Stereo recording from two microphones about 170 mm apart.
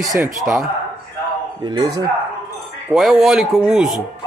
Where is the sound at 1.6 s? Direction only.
25° right (ahead or behind).